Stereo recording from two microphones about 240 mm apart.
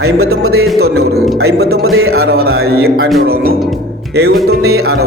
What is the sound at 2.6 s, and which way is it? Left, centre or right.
Speech, right.